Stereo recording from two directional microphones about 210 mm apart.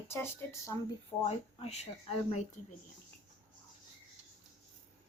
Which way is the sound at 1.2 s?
30° left (ahead or behind).